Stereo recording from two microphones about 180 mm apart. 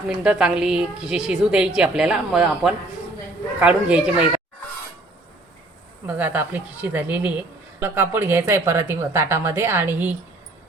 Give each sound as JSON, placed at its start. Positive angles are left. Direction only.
{"t": 0.2, "sound": "a woman's voice", "side_deg": -5}
{"t": 6.1, "sound": "speech", "side_deg": -10}